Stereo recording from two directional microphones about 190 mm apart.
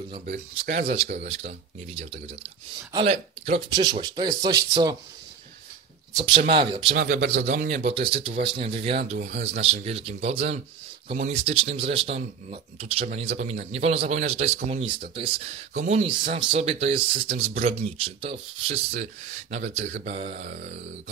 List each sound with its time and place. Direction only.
0.2 s speech: 55° right (ahead or behind)
0.7 s speech: 30° right (ahead or behind)
6.1 s speech: 25° right (ahead or behind)
6.9 s speech: 60° right (ahead or behind)
7.6 s speech: 35° right (ahead or behind)